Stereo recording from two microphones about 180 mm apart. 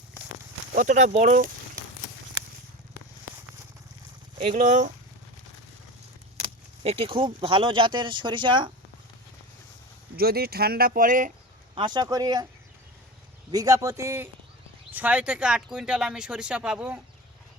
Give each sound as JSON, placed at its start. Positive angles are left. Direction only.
{"t": 0.7, "sound": "speech", "side_deg": -45}
{"t": 4.5, "sound": "speech", "side_deg": -45}
{"t": 6.4, "sound": "speech", "side_deg": -30}
{"t": 10.2, "sound": "speech", "side_deg": -60}
{"t": 11.7, "sound": "speech", "side_deg": -25}
{"t": 13.5, "sound": "speech", "side_deg": -20}